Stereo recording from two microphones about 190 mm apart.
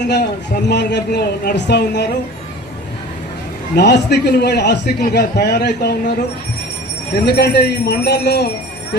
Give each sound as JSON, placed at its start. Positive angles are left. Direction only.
{"t": 0.1, "sound": "a man's voice", "side_deg": 60}
{"t": 3.8, "sound": "a man's voice", "side_deg": 60}
{"t": 7.3, "sound": "a man's voice", "side_deg": 60}